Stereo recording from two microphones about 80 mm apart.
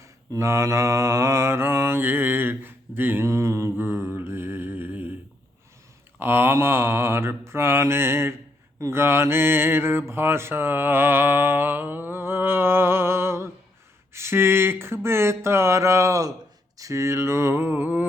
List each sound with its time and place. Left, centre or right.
0.3 s mantra: right
3.2 s mantra: right
6.1 s mantra: right